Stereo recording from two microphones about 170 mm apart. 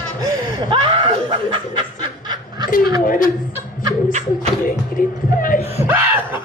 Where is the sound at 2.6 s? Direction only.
55° left (ahead or behind).